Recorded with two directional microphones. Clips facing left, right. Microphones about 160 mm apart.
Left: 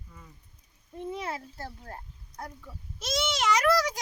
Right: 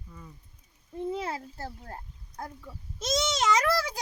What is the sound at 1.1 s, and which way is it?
A child's voice, 30° right (ahead or behind).